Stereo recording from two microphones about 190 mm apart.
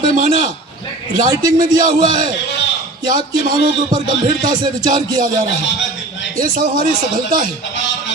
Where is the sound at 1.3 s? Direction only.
20° right (ahead or behind).